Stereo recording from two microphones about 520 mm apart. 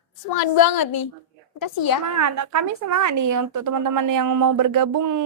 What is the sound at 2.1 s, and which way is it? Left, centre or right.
A woman's voice, right.